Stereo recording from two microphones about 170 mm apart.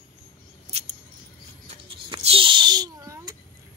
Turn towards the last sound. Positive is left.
turn(degrees=-25)  # may be behind; listen again after turning